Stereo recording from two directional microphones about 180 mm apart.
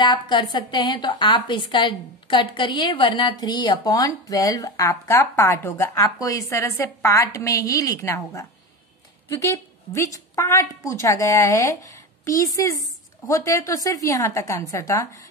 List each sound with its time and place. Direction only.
0.0 s a woman's voice: 25° left (ahead or behind)